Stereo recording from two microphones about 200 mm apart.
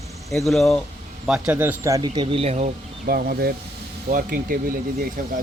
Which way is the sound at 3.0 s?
50° right (ahead or behind).